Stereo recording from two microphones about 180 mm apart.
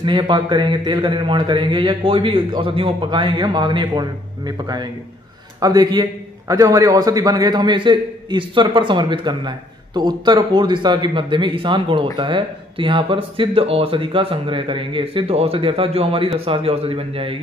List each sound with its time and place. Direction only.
0.0 s a man's voice: 25° right (ahead or behind)